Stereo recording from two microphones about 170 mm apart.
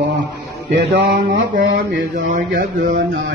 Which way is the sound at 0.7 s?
75° right (ahead or behind).